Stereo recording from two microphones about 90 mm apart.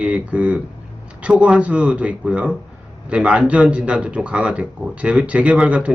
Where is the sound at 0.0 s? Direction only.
15° right (ahead or behind).